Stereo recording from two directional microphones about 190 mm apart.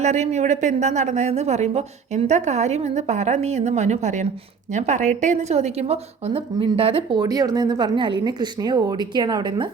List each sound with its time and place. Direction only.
0.0 s a woman's voice: 35° right (ahead or behind)